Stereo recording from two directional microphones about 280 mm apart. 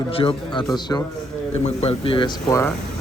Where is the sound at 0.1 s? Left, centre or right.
Centre.